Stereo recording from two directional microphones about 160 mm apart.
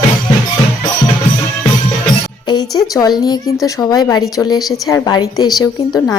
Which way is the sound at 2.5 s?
25° left (ahead or behind).